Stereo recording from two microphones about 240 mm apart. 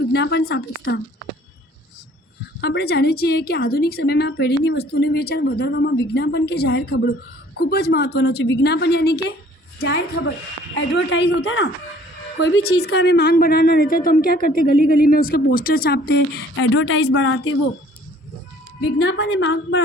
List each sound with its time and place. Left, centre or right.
0.1 s a woman's voice: left
2.6 s a woman's voice: left
18.8 s a woman's voice: left